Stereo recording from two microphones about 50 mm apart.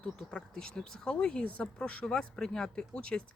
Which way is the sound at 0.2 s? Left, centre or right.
Centre.